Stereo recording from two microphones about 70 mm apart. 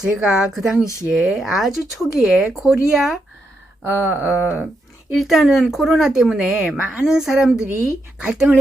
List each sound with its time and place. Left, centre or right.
0.0 s a woman's voice: centre
3.8 s a sound: right
5.1 s a woman's voice: centre